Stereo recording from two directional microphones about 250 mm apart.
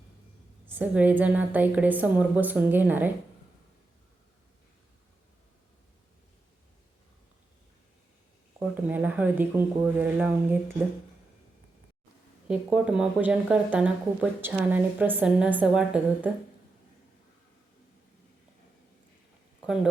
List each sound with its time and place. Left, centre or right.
0.7 s a woman's voice: centre
8.5 s a woman's voice: centre
12.5 s speech: centre
19.6 s speech: centre